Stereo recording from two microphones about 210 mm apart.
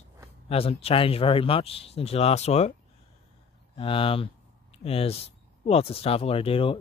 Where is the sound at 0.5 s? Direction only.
25° left (ahead or behind).